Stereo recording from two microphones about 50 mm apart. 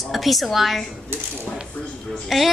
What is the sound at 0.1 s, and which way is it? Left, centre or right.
Speech, centre.